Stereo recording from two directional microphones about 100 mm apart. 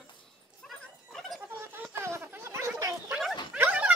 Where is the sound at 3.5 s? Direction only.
15° right (ahead or behind).